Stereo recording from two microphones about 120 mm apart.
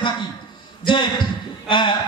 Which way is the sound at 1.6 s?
40° left (ahead or behind).